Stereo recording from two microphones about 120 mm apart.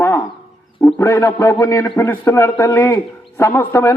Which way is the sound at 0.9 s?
25° left (ahead or behind).